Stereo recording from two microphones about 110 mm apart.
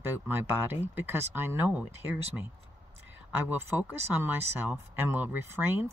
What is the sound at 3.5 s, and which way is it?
Speech, 20° right (ahead or behind).